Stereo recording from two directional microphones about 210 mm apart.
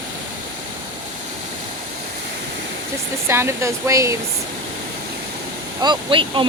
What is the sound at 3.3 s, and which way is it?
Speech, 10° right (ahead or behind).